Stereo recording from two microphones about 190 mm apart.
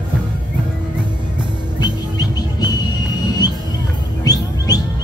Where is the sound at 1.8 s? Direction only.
20° left (ahead or behind).